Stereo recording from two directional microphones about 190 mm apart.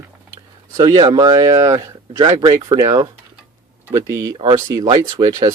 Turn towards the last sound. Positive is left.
turn(degrees=-20)  # may be behind; listen again after turning